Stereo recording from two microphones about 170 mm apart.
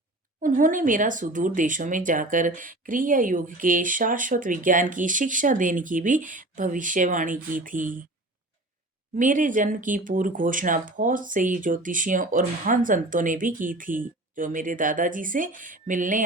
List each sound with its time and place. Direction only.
0.4 s speech: 50° right (ahead or behind)
9.1 s speech: 50° right (ahead or behind)